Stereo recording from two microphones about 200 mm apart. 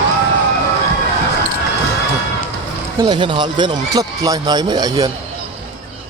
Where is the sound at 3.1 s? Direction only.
25° right (ahead or behind).